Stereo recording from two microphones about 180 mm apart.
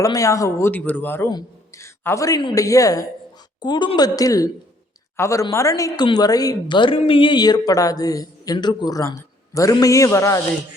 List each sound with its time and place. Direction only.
0.0 s a man's voice: 20° left (ahead or behind)